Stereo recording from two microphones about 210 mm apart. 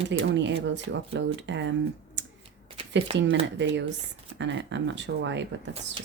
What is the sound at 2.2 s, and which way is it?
Typewriter, 55° right (ahead or behind).